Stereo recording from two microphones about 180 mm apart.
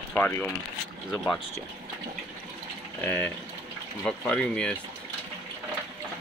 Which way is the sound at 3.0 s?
10° left (ahead or behind).